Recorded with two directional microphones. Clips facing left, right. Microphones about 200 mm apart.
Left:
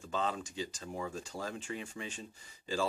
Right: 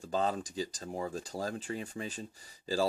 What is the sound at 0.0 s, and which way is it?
Speech, 35° right (ahead or behind).